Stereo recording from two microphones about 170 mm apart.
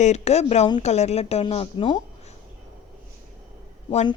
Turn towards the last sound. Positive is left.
turn(degrees=35)  # may be behind; listen again after turning